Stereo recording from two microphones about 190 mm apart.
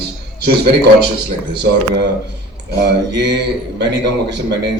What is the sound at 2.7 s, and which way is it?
A man's voice, 60° right (ahead or behind).